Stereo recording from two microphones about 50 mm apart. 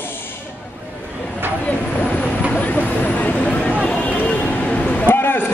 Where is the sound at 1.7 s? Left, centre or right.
Left.